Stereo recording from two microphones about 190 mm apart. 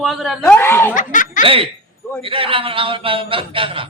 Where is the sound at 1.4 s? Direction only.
30° right (ahead or behind).